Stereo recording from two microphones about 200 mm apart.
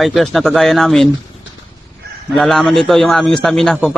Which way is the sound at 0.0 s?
Centre (ahead or behind).